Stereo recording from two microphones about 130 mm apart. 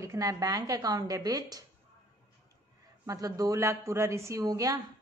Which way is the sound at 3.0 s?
25° right (ahead or behind).